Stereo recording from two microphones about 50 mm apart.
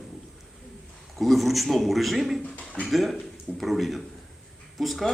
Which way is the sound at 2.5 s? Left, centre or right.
Left.